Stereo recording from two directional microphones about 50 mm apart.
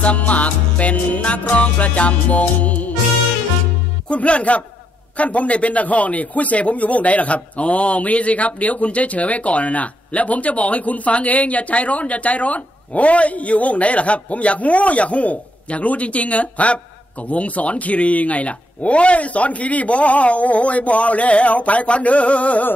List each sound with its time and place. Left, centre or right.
0.0 s a man's voice: left
4.1 s a man's voice: left